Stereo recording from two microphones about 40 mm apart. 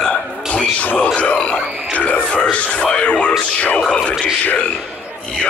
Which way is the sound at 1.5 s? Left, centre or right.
Left.